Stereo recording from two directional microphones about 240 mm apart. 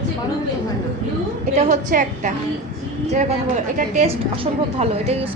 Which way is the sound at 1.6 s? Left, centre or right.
Right.